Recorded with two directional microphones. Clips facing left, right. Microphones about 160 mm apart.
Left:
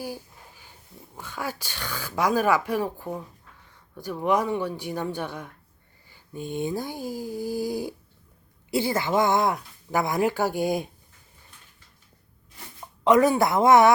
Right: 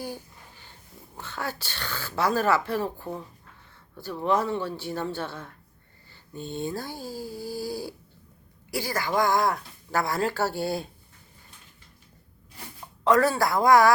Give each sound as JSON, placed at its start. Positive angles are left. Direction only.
{"t": 0.0, "sound": "speech", "side_deg": 10}
{"t": 13.1, "sound": "speech", "side_deg": 20}